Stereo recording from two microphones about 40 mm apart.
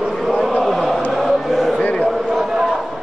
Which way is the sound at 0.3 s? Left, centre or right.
Centre.